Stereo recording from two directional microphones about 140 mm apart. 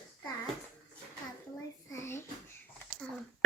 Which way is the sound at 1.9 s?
20° left (ahead or behind).